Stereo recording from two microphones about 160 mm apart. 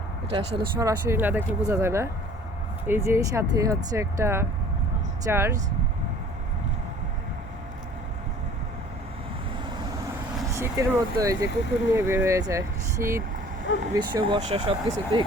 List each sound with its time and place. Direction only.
0.3 s speech: 35° right (ahead or behind)
0.8 s speech: 15° right (ahead or behind)
10.4 s speech: 20° right (ahead or behind)
13.9 s speech: 25° right (ahead or behind)